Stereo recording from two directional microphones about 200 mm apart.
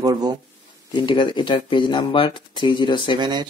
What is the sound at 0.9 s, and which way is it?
Speech, 25° left (ahead or behind).